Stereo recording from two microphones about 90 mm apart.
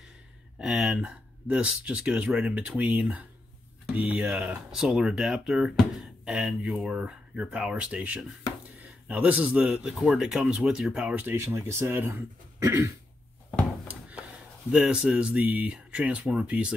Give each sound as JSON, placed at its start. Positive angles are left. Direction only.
{"t": 0.6, "sound": "a man's voice", "side_deg": -5}
{"t": 9.8, "sound": "speech", "side_deg": -5}
{"t": 11.2, "sound": "speech", "side_deg": -30}
{"t": 14.7, "sound": "speech", "side_deg": -10}